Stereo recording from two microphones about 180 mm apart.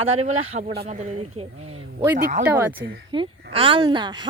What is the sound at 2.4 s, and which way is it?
Speech, 10° right (ahead or behind).